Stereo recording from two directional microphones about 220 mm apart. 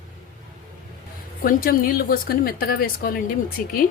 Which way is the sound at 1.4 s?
40° left (ahead or behind).